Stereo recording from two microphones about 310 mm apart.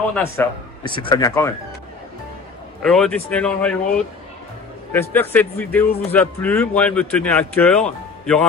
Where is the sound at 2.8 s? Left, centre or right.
Centre.